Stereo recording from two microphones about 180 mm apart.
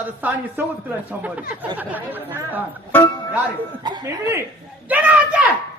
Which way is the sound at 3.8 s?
20° right (ahead or behind).